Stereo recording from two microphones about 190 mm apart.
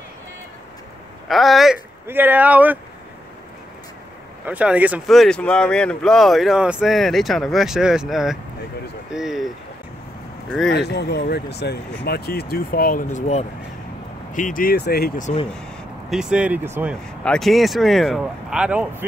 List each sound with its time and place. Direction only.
1.3 s speech: centre (ahead or behind)
4.5 s speech: 5° right (ahead or behind)
10.7 s speech: 60° left (ahead or behind)
16.1 s speech: 5° right (ahead or behind)